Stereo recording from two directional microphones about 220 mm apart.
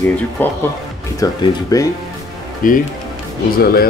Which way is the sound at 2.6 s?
35° left (ahead or behind).